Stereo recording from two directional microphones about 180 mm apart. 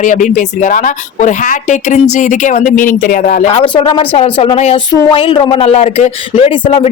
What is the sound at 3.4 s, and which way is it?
Speech, 35° left (ahead or behind).